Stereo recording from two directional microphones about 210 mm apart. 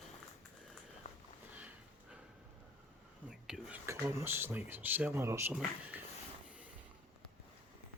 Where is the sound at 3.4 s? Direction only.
Centre (ahead or behind).